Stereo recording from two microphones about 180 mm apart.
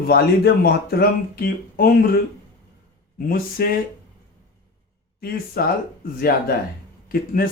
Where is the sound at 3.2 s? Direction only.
55° left (ahead or behind).